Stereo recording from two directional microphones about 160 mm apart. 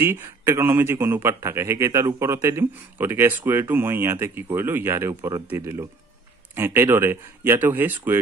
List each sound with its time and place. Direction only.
0.0 s a man's voice: 15° right (ahead or behind)